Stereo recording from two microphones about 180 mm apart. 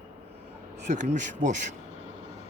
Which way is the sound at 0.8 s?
40° right (ahead or behind).